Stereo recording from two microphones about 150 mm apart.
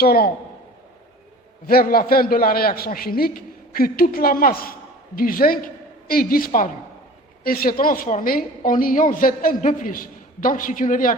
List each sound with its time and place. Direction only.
0.0 s a man's voice: 90° left
1.6 s a man's voice: 80° left; by 11.2 s 65° left (ahead or behind)